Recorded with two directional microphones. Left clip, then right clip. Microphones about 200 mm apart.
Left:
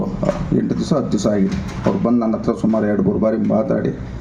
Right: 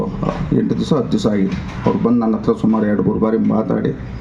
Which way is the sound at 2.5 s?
55° right (ahead or behind).